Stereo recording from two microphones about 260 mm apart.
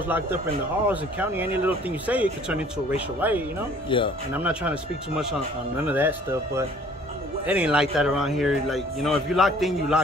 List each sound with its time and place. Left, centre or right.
0.8 s speech: centre
3.9 s speech: centre
4.3 s speech: centre